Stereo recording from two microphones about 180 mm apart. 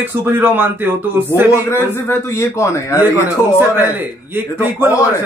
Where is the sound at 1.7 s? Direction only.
15° left (ahead or behind).